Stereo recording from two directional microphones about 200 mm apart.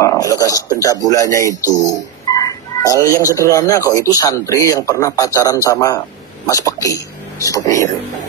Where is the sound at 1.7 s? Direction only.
15° right (ahead or behind).